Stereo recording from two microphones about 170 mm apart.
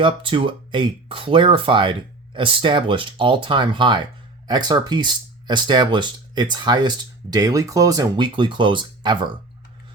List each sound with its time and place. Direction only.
0.0 s speech: 30° right (ahead or behind)